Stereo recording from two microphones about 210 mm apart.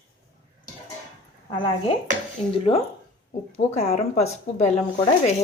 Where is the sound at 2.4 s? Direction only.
30° left (ahead or behind).